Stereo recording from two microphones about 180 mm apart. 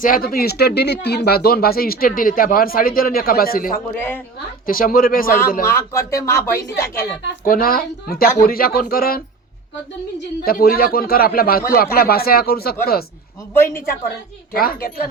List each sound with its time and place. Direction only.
0.0 s speech: 50° left (ahead or behind)
3.9 s speech: 10° left (ahead or behind)
4.6 s speech: 50° left (ahead or behind)
5.7 s speech: 15° left (ahead or behind)
7.4 s speech: 50° left (ahead or behind)
14.5 s speech: 55° left (ahead or behind)